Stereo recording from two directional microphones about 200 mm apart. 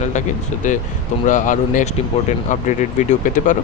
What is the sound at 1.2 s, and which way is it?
Speech, 40° left (ahead or behind).